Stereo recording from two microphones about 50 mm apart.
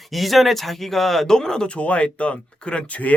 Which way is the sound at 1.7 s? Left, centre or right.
Left.